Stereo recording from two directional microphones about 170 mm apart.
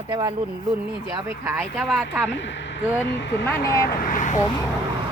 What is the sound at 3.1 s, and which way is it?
Speech, 90° left.